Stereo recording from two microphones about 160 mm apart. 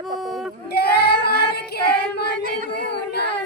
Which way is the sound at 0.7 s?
90° left.